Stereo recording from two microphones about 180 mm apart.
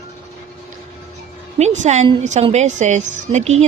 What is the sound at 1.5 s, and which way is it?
Speech, 40° right (ahead or behind).